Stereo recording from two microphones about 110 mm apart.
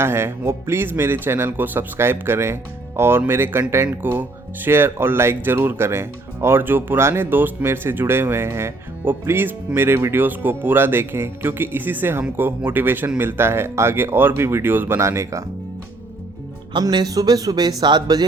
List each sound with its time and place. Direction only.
0.0 s speech: 20° right (ahead or behind)
16.8 s speech: 35° right (ahead or behind)